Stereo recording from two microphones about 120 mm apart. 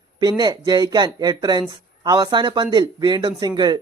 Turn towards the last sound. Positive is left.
turn(degrees=-35)  # may be behind; listen again after turning